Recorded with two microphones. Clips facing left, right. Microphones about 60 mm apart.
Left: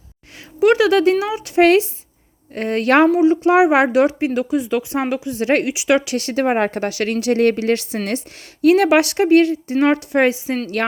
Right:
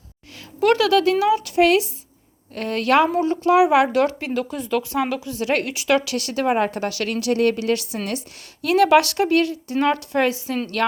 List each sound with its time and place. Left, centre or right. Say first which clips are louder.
0.6 s speech: left 4 dB; centre
0.9 s speech: left 1 dB; left
1.5 s speech: left 9 dB; left
3.1 s speech: left 6 dB; centre
3.5 s speech: right 1 dB; left
3.9 s speech: left 4 dB; centre
5.7 s speech: left 3 dB; centre
6.1 s speech: left 3 dB; left